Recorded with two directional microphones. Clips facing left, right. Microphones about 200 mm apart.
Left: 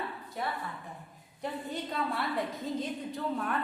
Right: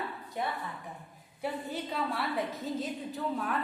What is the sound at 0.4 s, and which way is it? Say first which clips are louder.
Speech: right 1 dB; 20° right (ahead or behind).